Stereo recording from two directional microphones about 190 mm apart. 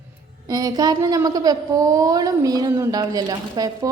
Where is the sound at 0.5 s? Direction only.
20° right (ahead or behind).